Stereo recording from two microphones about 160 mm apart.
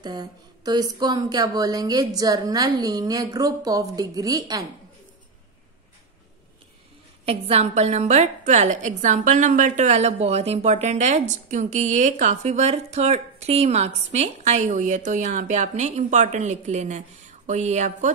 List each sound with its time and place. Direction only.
0.0 s speech: 25° right (ahead or behind)
7.2 s a woman's voice: 40° right (ahead or behind)